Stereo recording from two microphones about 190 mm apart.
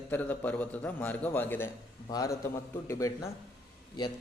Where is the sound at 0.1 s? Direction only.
10° left (ahead or behind).